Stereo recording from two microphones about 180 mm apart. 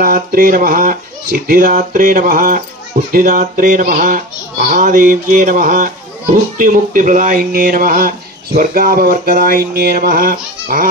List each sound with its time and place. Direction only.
0.0 s speech: 55° right (ahead or behind)